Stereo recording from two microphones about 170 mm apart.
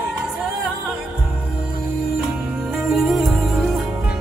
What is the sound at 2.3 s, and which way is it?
Music, 5° right (ahead or behind).